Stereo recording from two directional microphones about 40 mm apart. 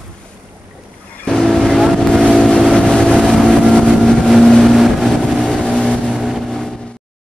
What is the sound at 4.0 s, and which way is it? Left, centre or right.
Vehicle, centre.